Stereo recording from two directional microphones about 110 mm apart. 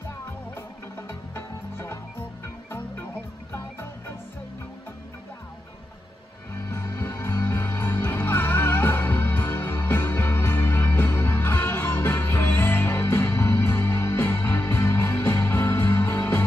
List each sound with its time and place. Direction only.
0.6 s music: 25° left (ahead or behind)
6.5 s music: 25° left (ahead or behind)